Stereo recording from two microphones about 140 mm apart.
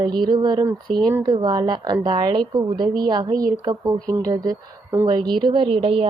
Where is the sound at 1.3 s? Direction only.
30° right (ahead or behind).